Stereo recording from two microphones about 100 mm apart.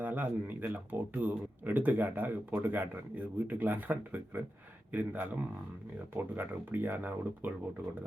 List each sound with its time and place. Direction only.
0.0 s speech: 20° right (ahead or behind)